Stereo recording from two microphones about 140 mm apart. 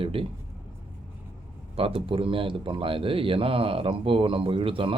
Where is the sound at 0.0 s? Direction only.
40° right (ahead or behind).